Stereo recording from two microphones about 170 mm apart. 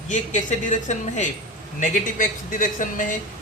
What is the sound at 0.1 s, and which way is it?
A man's voice, 45° left (ahead or behind).